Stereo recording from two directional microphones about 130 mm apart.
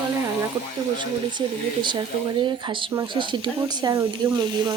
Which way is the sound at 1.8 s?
35° right (ahead or behind).